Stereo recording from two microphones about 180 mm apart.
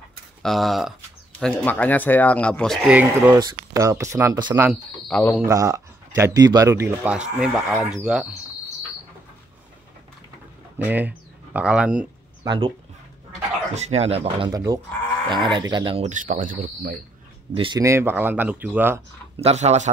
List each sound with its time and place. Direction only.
0.4 s speech: centre (ahead or behind)
3.0 s speech: 10° right (ahead or behind)
5.0 s speech: 5° left (ahead or behind)
5.4 s speech: 15° right (ahead or behind)
10.9 s speech: 10° right (ahead or behind)
12.4 s speech: 25° right (ahead or behind)
13.7 s speech: 35° right (ahead or behind)
14.5 s speech: 20° right (ahead or behind)
16.1 s speech: 45° right (ahead or behind)
17.6 s speech: 25° right (ahead or behind)
17.8 s speech: 15° right (ahead or behind)
19.3 s speech: 35° right (ahead or behind)